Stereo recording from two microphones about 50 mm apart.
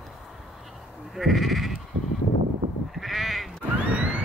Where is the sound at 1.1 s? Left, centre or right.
Centre.